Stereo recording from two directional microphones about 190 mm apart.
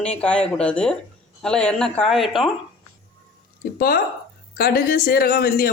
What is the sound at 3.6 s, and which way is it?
Speech, 50° left (ahead or behind).